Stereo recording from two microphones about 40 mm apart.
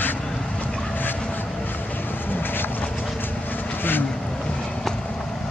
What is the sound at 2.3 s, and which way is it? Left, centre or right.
Vehicle, left.